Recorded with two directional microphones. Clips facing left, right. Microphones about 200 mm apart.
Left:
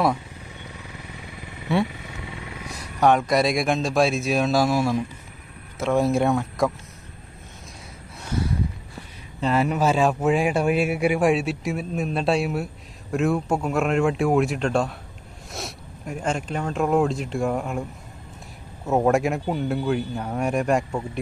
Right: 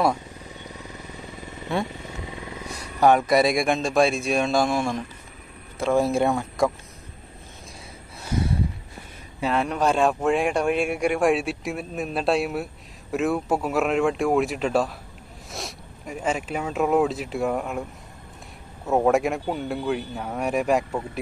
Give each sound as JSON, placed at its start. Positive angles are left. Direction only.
{"t": 2.7, "sound": "speech", "side_deg": 0}
{"t": 9.4, "sound": "speech", "side_deg": 0}
{"t": 18.9, "sound": "speech", "side_deg": 0}